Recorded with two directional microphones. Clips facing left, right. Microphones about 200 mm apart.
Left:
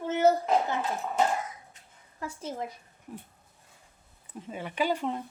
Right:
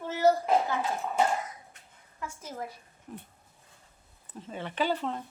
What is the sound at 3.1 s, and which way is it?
Speech, 10° left (ahead or behind).